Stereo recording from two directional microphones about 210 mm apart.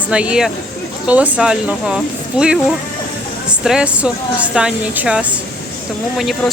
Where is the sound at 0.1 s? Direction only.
5° right (ahead or behind).